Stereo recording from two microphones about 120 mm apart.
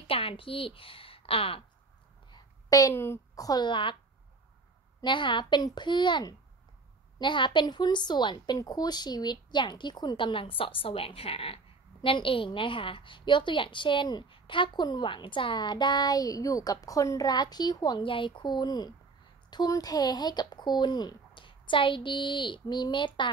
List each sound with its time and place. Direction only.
0.0 s a woman's voice: 50° left (ahead or behind)
2.3 s a sound: 30° left (ahead or behind)
2.9 s a woman's voice: 20° left (ahead or behind); by 3.9 s 40° left (ahead or behind)
5.0 s a woman's voice: 40° left (ahead or behind)